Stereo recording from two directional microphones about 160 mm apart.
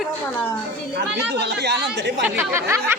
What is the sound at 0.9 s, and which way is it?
Speech, 90° right.